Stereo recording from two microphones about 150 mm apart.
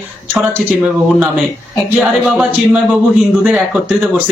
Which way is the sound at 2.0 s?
5° right (ahead or behind).